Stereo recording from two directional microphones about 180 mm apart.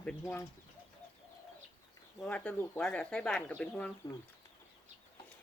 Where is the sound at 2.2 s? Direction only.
5° left (ahead or behind).